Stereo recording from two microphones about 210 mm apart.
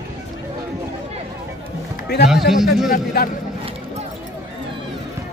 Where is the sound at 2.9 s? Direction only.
40° left (ahead or behind).